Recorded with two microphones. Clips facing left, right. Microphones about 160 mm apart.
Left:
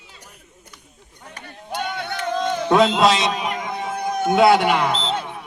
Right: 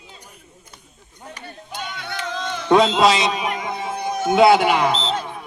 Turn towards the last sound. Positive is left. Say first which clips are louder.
# right 1 dB
turn(degrees=0)  # may be behind; listen again after turning